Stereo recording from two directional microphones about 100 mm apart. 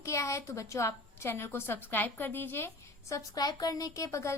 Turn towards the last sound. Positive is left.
turn(degrees=30)  # may be behind; listen again after turning